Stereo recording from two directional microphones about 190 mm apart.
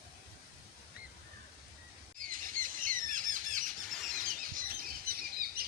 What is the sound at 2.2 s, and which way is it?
Squawk, 45° right (ahead or behind).